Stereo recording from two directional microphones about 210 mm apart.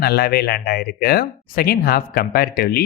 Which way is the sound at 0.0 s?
45° left (ahead or behind).